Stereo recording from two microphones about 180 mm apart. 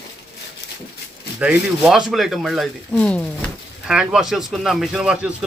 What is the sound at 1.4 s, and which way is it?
Speech, 5° right (ahead or behind).